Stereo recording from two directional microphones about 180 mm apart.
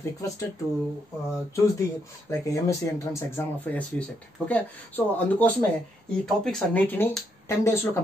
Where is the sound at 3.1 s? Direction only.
15° left (ahead or behind).